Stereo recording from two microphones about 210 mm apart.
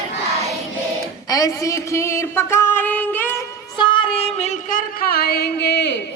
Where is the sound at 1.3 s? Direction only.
15° left (ahead or behind); by 6.0 s 55° left (ahead or behind).